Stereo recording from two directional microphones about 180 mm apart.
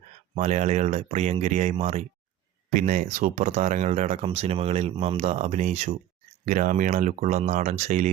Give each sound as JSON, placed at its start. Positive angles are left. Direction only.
{"t": 0.3, "sound": "speech", "side_deg": -40}